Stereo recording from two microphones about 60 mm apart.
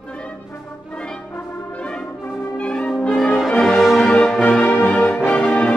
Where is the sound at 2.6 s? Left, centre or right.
Centre.